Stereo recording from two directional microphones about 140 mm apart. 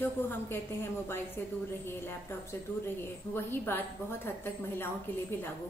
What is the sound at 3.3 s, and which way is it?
A woman's voice, 15° left (ahead or behind).